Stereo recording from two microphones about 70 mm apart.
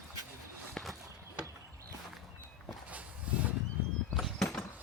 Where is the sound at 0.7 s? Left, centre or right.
Centre.